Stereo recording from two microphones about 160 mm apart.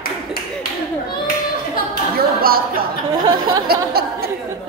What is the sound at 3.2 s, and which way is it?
Speech, 25° right (ahead or behind).